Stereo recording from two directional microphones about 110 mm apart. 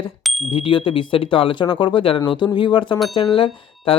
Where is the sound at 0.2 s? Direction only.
Centre (ahead or behind).